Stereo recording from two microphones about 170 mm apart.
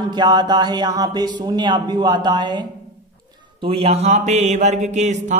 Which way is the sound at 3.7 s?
35° right (ahead or behind).